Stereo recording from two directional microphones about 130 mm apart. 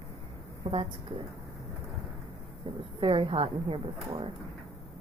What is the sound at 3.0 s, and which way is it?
A woman's voice, 45° right (ahead or behind).